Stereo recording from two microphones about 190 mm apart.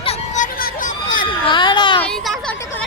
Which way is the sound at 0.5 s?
45° left (ahead or behind).